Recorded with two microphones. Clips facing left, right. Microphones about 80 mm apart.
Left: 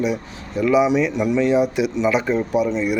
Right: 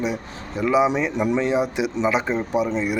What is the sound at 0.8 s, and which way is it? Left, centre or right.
Speech, right.